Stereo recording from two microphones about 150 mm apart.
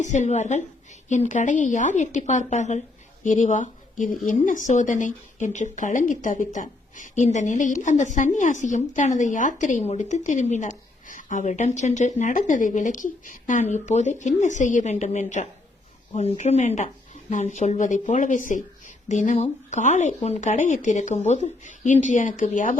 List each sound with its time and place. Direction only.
0.0 s a woman's voice: 55° left (ahead or behind)